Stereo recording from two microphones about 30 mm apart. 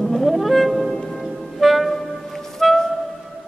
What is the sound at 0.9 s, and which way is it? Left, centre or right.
Music, centre.